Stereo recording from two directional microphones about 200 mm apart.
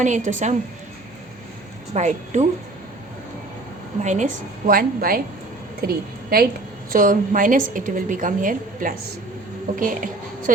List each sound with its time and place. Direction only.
0.0 s a woman's voice: 40° right (ahead or behind)
1.9 s a woman's voice: 35° right (ahead or behind)
4.0 s a woman's voice: 35° right (ahead or behind)